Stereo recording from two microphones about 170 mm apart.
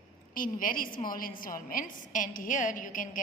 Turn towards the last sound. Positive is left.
turn(degrees=50)  # may be behind; listen again after turning